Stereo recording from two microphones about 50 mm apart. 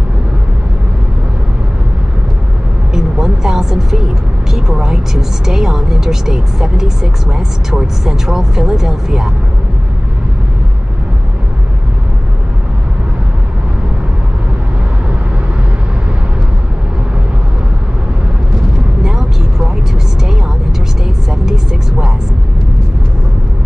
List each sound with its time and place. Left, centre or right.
2.9 s vehicle: centre
4.5 s speech: centre